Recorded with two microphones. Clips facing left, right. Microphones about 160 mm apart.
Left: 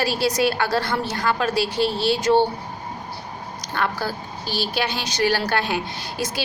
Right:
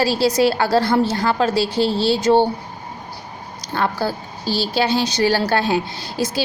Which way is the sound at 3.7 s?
30° right (ahead or behind).